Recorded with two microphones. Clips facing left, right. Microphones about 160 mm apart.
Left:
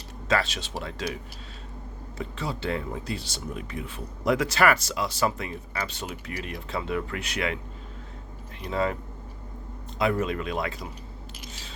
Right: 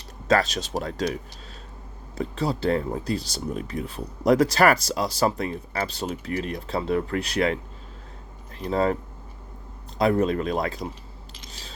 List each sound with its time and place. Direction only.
0.3 s speech: 40° right (ahead or behind)
8.6 s speech: 35° right (ahead or behind)
10.0 s speech: 35° right (ahead or behind)